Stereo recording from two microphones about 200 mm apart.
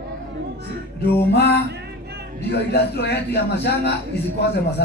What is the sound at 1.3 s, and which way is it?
Speech, 55° left (ahead or behind).